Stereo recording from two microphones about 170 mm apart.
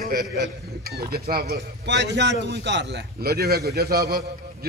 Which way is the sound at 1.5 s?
90° right.